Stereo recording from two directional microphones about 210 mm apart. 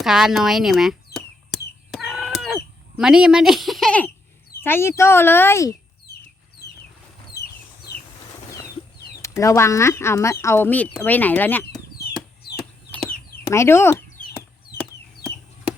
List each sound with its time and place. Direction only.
0.0 s a sound: centre (ahead or behind)
3.0 s speech: 5° right (ahead or behind); by 5.7 s 15° left (ahead or behind)
9.2 s speech: 15° left (ahead or behind)
11.9 s chicken: 50° left (ahead or behind)
12.5 s chicken: 5° left (ahead or behind)
13.5 s speech: 10° left (ahead or behind)